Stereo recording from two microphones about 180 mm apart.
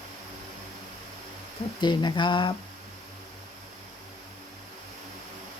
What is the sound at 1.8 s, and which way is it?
Speech, 25° left (ahead or behind).